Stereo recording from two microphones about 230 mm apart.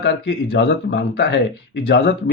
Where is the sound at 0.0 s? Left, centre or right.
Left.